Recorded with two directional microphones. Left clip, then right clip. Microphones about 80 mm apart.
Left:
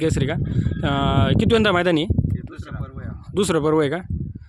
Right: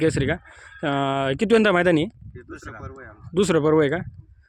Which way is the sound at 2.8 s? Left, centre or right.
Centre.